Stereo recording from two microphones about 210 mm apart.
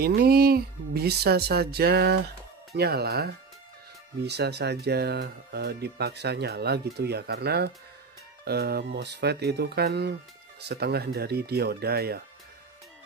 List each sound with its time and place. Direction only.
0.0 s speech: 45° right (ahead or behind)